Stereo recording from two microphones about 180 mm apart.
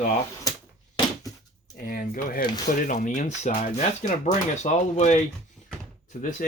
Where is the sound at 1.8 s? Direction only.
50° left (ahead or behind).